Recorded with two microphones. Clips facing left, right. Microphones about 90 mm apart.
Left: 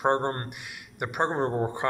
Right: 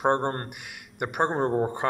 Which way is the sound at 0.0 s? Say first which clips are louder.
Right 1 dB; 15° right (ahead or behind).